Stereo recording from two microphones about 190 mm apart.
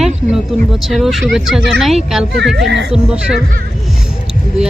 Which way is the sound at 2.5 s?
65° right (ahead or behind).